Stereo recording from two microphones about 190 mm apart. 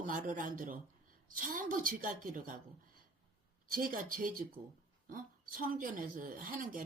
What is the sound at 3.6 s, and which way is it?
Speech, 50° right (ahead or behind).